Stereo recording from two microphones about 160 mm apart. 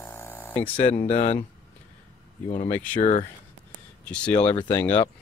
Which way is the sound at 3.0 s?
45° left (ahead or behind).